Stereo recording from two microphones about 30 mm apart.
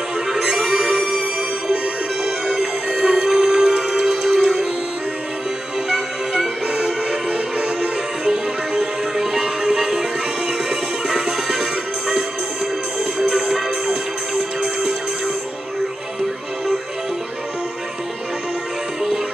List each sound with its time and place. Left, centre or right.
0.3 s music: centre
0.7 s music: right
2.2 s music: centre
6.7 s music: right
8.3 s music: centre
13.3 s music: centre